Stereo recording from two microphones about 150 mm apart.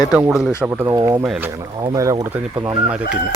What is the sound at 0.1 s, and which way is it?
Speech, 5° right (ahead or behind).